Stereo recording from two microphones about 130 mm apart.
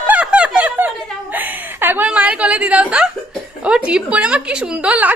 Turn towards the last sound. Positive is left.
turn(degrees=-10)  # may be behind; listen again after turning